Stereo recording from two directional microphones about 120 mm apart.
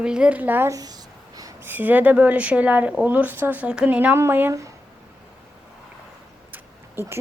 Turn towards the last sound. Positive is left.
turn(degrees=-20)  # may be behind; listen again after turning